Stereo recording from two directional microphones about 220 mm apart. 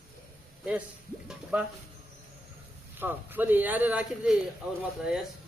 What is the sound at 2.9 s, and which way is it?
Speech, 10° right (ahead or behind).